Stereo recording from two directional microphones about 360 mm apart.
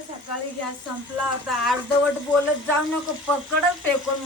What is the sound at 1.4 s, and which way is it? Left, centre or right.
Speech, centre.